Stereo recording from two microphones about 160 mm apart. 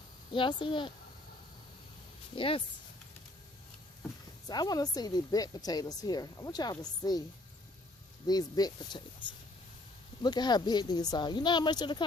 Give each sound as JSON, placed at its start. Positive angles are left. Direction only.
{"t": 0.3, "sound": "speech", "side_deg": 30}
{"t": 2.3, "sound": "speech", "side_deg": 35}
{"t": 4.4, "sound": "speech", "side_deg": 25}
{"t": 8.3, "sound": "speech", "side_deg": 25}
{"t": 10.2, "sound": "speech", "side_deg": 25}